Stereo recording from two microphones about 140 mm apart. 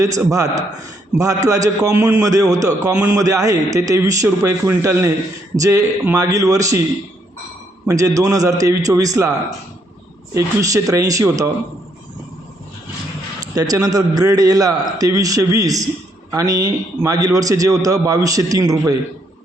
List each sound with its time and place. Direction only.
0.0 s a man's voice: 25° right (ahead or behind)
7.9 s a man's voice: 25° right (ahead or behind)
10.3 s a man's voice: 25° right (ahead or behind)
13.4 s a man's voice: 25° right (ahead or behind)